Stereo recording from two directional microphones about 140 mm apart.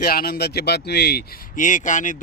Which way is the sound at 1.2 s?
70° left (ahead or behind).